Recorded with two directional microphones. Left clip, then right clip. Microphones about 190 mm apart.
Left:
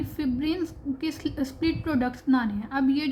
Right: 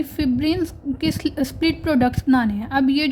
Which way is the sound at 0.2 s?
45° right (ahead or behind).